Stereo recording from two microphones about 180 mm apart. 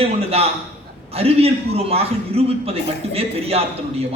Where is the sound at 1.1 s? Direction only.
35° right (ahead or behind).